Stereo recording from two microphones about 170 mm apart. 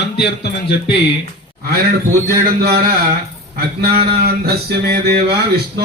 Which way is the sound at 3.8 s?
65° right (ahead or behind).